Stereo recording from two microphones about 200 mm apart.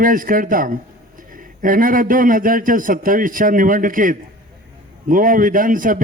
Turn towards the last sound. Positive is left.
turn(degrees=-45)  # may be behind; listen again after turning